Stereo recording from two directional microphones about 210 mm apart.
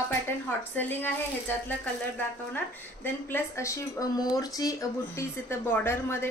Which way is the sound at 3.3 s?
15° left (ahead or behind).